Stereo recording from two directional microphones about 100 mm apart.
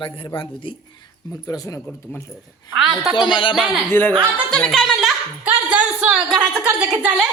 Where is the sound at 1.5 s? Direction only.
35° left (ahead or behind).